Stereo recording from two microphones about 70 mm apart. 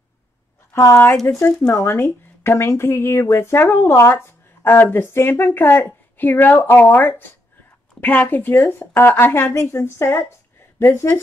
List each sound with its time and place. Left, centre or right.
1.3 s speech: left
4.6 s speech: left